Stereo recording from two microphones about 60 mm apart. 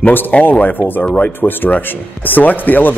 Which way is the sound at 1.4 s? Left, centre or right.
Left.